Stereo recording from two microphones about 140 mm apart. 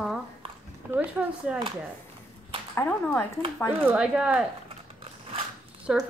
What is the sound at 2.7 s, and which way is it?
Speech, 15° left (ahead or behind).